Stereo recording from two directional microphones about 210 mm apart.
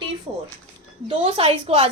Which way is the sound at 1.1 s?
25° right (ahead or behind).